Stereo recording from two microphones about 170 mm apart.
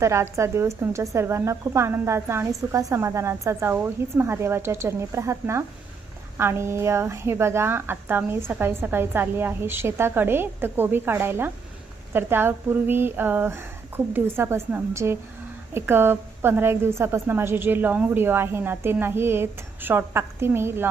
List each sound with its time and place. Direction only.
0.0 s speech: 15° right (ahead or behind)